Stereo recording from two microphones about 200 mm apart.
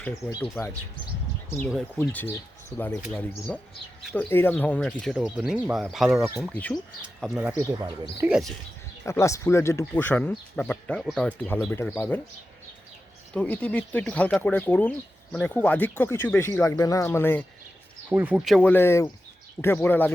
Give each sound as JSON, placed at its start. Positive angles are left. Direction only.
{"t": 2.0, "sound": "speech", "side_deg": 10}
{"t": 3.0, "sound": "speech", "side_deg": 0}
{"t": 7.7, "sound": "speech", "side_deg": -15}
{"t": 9.0, "sound": "speech", "side_deg": 15}
{"t": 13.3, "sound": "speech", "side_deg": 5}
{"t": 18.1, "sound": "speech", "side_deg": -5}